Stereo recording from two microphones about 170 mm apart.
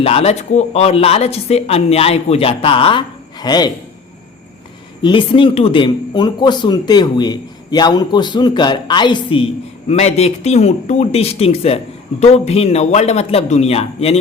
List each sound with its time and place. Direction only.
0.0 s speech: 35° left (ahead or behind)
5.0 s speech: 30° left (ahead or behind)